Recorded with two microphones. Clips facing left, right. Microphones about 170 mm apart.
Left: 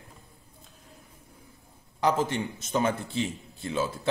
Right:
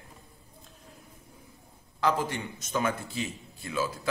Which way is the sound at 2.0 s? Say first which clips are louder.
Left 2 dB; 20° left (ahead or behind).